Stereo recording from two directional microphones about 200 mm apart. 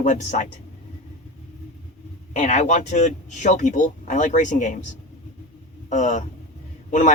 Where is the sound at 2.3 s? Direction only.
35° left (ahead or behind).